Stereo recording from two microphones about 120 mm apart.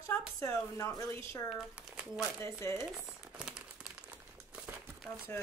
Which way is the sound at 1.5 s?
5° right (ahead or behind).